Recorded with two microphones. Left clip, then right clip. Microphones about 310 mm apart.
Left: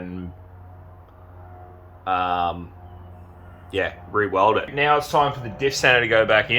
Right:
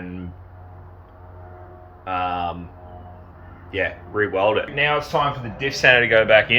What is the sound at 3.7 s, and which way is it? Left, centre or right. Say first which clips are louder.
Speech: even; left.